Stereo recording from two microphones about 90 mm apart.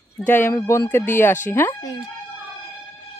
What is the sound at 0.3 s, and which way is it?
Speech, 30° left (ahead or behind).